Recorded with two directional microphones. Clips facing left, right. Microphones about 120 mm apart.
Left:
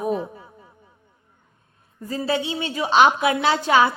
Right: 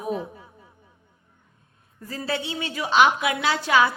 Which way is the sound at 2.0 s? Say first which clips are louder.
Left 5 dB; 20° left (ahead or behind).